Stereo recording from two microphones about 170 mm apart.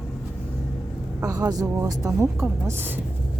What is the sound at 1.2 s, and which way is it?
A woman's voice, 20° right (ahead or behind).